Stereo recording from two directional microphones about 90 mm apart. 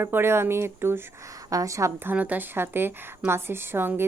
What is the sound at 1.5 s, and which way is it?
Speech, 40° right (ahead or behind).